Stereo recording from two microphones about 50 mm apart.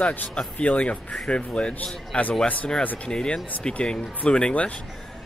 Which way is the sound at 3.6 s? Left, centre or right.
Left.